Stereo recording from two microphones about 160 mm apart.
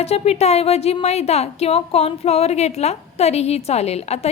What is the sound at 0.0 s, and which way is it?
A woman's voice, 40° left (ahead or behind).